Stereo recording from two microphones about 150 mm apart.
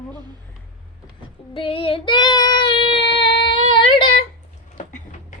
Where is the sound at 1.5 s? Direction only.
35° left (ahead or behind).